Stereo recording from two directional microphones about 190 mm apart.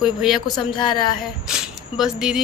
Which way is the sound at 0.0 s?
Centre (ahead or behind).